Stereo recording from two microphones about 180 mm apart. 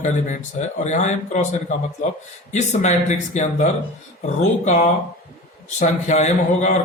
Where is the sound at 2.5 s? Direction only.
40° left (ahead or behind).